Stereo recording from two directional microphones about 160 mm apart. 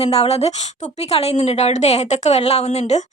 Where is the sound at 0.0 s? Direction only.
40° left (ahead or behind).